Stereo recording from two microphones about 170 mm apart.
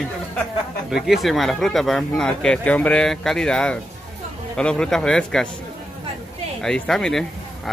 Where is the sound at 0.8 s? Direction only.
Centre (ahead or behind).